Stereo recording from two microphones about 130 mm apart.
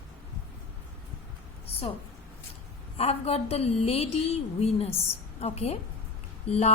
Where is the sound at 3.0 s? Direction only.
50° left (ahead or behind).